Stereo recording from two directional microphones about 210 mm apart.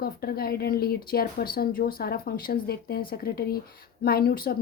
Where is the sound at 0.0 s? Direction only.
45° left (ahead or behind).